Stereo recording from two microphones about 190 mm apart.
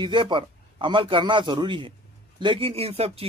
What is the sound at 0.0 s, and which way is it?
A man's voice, 25° right (ahead or behind).